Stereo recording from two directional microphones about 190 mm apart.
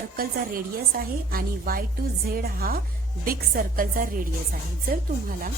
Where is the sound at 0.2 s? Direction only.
50° right (ahead or behind).